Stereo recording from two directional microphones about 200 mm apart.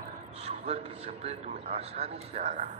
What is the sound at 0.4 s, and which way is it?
A man's voice, 30° right (ahead or behind).